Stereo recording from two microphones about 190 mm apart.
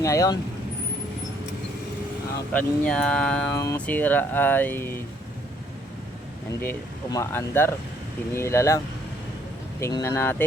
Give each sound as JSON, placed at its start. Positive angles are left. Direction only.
{"t": 0.0, "sound": "speech", "side_deg": 15}
{"t": 2.5, "sound": "speech", "side_deg": 5}
{"t": 6.6, "sound": "speech", "side_deg": 15}
{"t": 9.8, "sound": "speech", "side_deg": 15}